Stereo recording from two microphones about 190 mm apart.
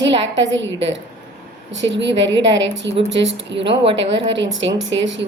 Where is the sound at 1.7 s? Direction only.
70° right (ahead or behind).